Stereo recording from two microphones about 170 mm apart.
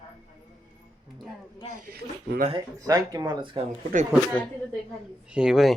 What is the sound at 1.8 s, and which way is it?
Speech, 60° right (ahead or behind).